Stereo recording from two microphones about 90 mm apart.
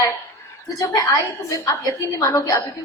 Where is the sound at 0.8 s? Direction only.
40° left (ahead or behind).